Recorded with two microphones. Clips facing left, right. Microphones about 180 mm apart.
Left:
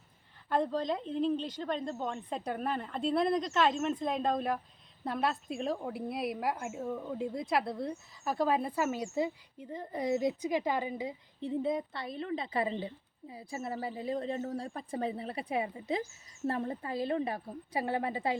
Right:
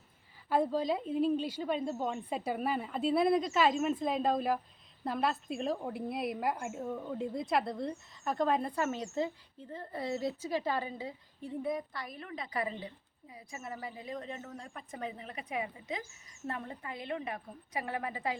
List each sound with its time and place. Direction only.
0.5 s a woman's voice: 5° right (ahead or behind); by 18.3 s 30° left (ahead or behind)